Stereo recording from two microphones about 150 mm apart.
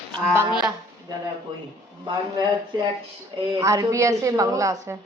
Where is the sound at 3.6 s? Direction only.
20° right (ahead or behind).